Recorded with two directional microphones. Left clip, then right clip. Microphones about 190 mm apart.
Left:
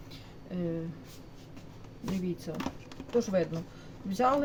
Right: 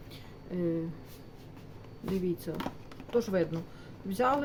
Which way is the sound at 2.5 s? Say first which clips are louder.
Even; 30° right (ahead or behind).